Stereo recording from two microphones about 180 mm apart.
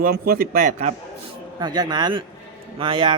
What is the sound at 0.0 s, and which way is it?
Speech, 55° right (ahead or behind).